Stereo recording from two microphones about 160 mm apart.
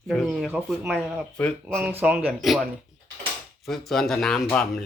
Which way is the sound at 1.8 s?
10° right (ahead or behind).